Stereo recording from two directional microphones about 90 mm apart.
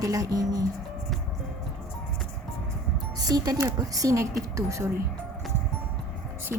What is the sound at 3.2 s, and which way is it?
A woman's voice, 45° right (ahead or behind).